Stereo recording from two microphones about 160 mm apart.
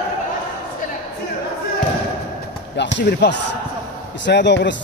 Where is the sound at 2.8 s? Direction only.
90° left.